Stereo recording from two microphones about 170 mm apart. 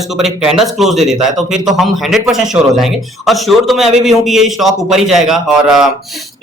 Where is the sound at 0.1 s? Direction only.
Centre (ahead or behind).